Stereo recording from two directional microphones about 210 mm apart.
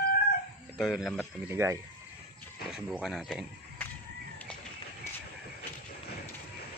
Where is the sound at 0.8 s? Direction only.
Centre (ahead or behind).